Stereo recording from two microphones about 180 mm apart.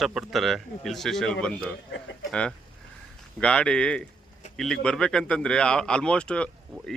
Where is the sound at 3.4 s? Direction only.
5° left (ahead or behind).